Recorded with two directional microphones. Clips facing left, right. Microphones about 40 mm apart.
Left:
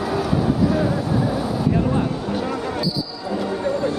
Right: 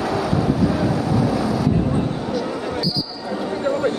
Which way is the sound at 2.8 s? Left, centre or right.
Right.